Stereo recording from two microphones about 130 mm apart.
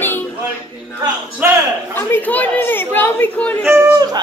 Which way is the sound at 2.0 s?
15° left (ahead or behind).